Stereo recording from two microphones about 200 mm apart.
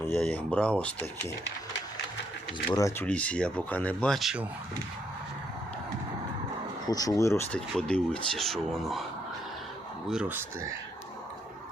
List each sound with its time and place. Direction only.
0.0 s speech: 10° left (ahead or behind)
2.7 s speech: 10° left (ahead or behind)
6.8 s speech: 20° left (ahead or behind); by 9.0 s centre (ahead or behind)
10.1 s speech: 5° right (ahead or behind)